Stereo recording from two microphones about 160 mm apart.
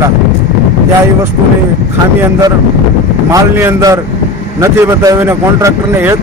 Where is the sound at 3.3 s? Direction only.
20° right (ahead or behind).